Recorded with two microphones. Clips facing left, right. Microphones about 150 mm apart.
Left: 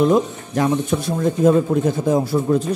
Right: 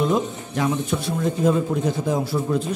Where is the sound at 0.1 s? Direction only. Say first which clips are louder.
Left 5 dB; 45° left (ahead or behind).